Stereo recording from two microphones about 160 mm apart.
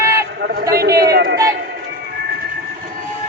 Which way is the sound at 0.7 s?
75° right (ahead or behind).